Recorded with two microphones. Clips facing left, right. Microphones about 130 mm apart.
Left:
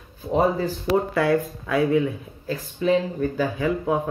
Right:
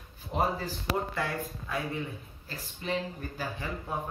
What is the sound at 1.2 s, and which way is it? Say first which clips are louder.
Speech: left 13 dB; 85° left.